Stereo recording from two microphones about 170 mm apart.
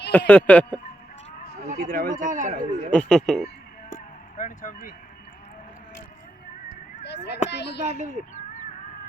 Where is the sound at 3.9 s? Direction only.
50° left (ahead or behind).